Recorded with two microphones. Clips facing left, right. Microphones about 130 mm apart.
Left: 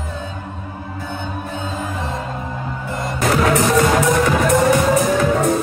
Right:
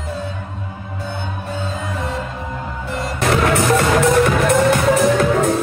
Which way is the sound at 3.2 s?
60° right (ahead or behind).